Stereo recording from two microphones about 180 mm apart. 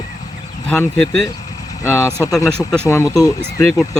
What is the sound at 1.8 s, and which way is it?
Speech, 15° left (ahead or behind).